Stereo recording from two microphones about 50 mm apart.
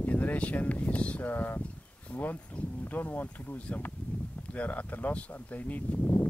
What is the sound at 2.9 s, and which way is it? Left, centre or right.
Speech, left.